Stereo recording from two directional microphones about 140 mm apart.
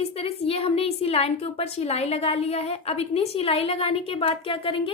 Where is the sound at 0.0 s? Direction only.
45° left (ahead or behind).